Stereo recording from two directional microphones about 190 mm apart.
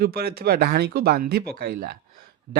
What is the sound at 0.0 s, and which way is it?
Speech, 55° right (ahead or behind).